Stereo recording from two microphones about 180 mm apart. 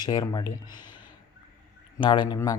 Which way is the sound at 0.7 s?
25° left (ahead or behind).